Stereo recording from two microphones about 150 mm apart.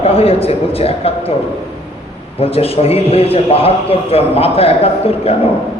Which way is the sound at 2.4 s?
40° left (ahead or behind).